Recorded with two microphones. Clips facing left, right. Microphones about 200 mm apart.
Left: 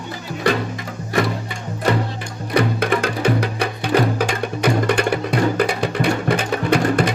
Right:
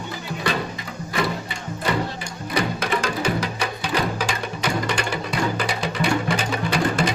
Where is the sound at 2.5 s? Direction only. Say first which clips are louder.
Left 5 dB; 55° left (ahead or behind).